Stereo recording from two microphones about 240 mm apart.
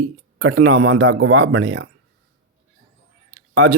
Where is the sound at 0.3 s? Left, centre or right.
Right.